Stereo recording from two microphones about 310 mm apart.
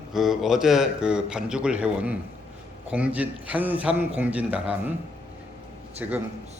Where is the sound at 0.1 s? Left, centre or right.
Centre.